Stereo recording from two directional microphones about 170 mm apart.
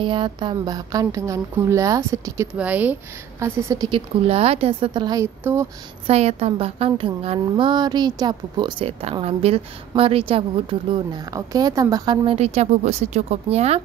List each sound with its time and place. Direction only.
0.0 s a woman's voice: 30° right (ahead or behind)
4.3 s a woman's voice: 35° right (ahead or behind); by 5.7 s 15° right (ahead or behind)
6.0 s a woman's voice: 35° right (ahead or behind)
12.4 s speech: 40° right (ahead or behind)